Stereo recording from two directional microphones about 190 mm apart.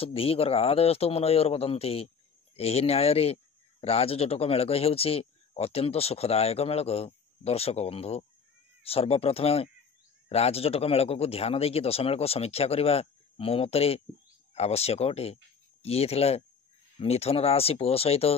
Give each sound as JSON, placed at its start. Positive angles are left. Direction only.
{"t": 0.0, "sound": "speech", "side_deg": 30}